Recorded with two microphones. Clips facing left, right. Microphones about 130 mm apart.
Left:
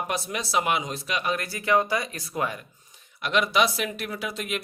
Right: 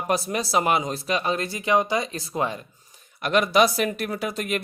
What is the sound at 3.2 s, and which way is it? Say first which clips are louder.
Speech: right 4 dB; 45° right (ahead or behind).